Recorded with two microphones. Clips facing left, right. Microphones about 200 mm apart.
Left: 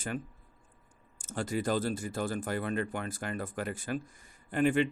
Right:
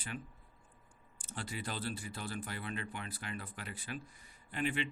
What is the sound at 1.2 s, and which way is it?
Speech, 45° left (ahead or behind).